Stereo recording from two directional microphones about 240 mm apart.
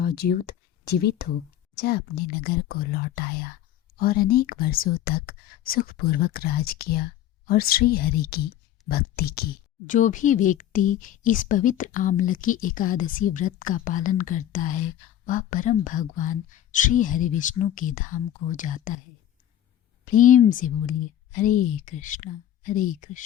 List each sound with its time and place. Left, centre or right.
0.0 s speech: left
20.1 s speech: left